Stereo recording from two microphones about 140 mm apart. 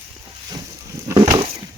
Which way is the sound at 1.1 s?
30° right (ahead or behind).